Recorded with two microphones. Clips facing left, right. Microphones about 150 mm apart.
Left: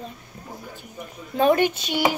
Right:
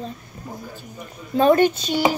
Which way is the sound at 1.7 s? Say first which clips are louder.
Right 5 dB; 40° right (ahead or behind).